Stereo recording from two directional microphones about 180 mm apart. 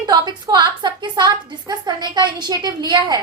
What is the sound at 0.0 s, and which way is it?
A woman's voice, 20° right (ahead or behind).